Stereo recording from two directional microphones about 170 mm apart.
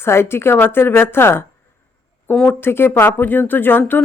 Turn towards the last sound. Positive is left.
turn(degrees=10)  # may be behind; listen again after turning